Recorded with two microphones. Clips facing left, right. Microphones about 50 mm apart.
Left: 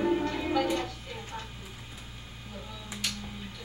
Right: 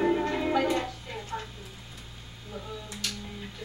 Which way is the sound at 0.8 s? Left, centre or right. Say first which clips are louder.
Right 1 dB; centre.